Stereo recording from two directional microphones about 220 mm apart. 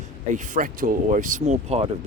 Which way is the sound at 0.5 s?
40° right (ahead or behind).